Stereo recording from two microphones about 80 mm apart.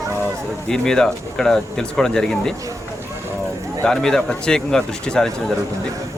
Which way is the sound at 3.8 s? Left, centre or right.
Centre.